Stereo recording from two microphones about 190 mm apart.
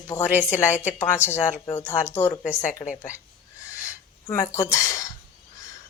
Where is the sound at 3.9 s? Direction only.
15° left (ahead or behind).